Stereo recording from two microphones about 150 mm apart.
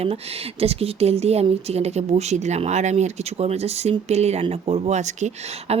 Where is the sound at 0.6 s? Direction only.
40° right (ahead or behind).